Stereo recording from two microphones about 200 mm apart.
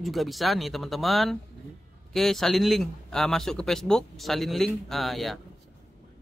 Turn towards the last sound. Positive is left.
turn(degrees=0)  # may be behind; listen again after turning